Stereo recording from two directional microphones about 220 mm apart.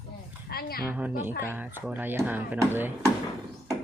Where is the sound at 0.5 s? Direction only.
45° left (ahead or behind).